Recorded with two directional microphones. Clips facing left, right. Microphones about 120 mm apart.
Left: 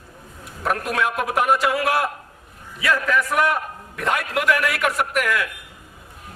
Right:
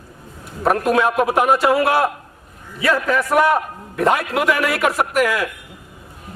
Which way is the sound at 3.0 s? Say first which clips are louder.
Right 4 dB; 35° right (ahead or behind).